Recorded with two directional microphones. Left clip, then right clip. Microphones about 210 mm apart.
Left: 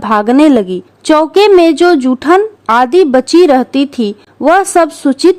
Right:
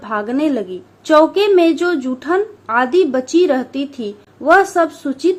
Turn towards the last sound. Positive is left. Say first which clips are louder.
# left 8 dB
turn(degrees=45)  # may be behind; listen again after turning